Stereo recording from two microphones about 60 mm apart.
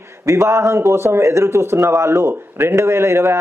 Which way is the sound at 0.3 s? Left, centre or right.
Right.